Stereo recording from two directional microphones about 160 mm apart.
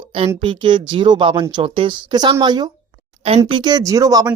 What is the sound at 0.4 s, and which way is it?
Speech, 30° right (ahead or behind).